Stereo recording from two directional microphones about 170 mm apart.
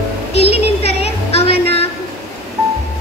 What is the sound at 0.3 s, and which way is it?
Music, 35° left (ahead or behind).